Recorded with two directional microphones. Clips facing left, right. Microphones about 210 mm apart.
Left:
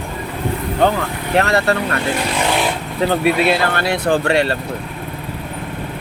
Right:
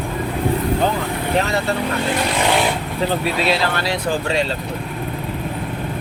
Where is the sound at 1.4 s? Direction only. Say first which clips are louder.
Left 6 dB; 75° left (ahead or behind).